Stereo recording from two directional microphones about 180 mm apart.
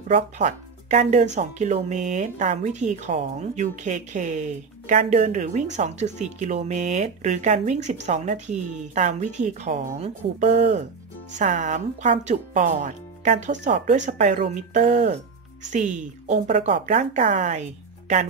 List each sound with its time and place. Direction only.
0.1 s speech: 40° right (ahead or behind)